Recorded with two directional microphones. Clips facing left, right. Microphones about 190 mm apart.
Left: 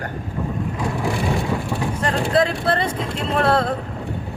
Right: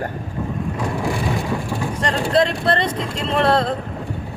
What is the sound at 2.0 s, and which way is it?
Speech, 5° left (ahead or behind).